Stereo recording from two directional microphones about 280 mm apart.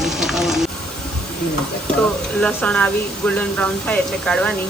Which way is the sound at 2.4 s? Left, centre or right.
Centre.